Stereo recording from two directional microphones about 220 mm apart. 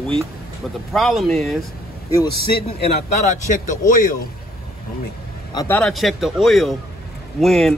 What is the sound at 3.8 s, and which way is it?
Speech, 40° left (ahead or behind).